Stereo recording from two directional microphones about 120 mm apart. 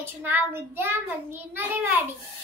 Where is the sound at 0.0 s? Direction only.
15° right (ahead or behind).